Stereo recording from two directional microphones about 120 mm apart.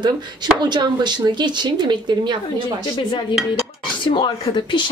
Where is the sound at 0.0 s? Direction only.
40° right (ahead or behind).